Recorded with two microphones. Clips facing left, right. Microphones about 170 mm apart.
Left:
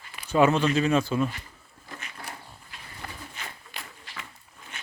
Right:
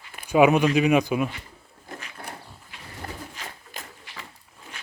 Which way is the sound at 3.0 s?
35° right (ahead or behind).